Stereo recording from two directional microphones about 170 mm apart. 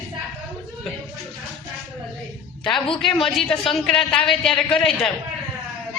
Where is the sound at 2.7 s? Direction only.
30° left (ahead or behind).